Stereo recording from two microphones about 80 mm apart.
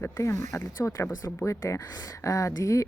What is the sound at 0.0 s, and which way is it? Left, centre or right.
Speech, left.